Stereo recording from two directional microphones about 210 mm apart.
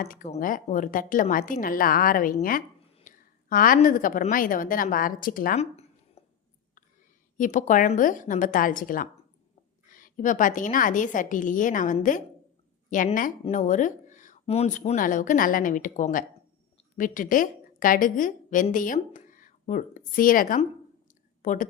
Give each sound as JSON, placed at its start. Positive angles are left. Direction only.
{"t": 0.0, "sound": "speech", "side_deg": 40}
{"t": 2.4, "sound": "a sound", "side_deg": 40}
{"t": 3.5, "sound": "speech", "side_deg": 40}
{"t": 7.3, "sound": "a woman's voice", "side_deg": 35}